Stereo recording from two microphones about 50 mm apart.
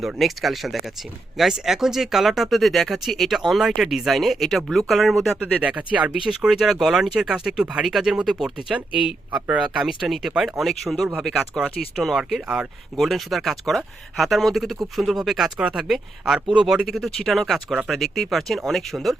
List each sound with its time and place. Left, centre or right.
0.2 s speech: centre
5.6 s speech: right
6.2 s speech: centre
9.8 s speech: centre
16.8 s speech: centre